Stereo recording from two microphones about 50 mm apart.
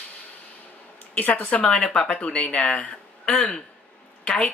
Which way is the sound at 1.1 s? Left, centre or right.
Left.